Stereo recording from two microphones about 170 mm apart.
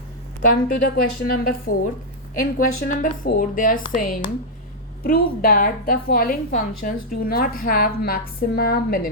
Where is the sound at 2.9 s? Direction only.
55° left (ahead or behind).